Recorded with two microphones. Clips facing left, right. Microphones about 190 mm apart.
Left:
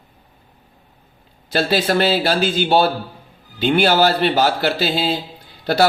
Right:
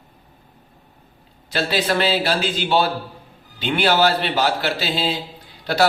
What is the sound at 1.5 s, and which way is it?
A man's voice, 35° left (ahead or behind).